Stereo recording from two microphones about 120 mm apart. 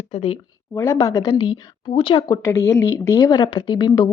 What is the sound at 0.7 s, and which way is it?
Speech, 20° left (ahead or behind).